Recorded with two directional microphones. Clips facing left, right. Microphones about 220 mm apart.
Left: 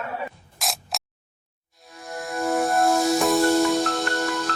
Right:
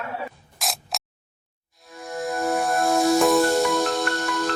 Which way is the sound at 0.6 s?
Centre (ahead or behind).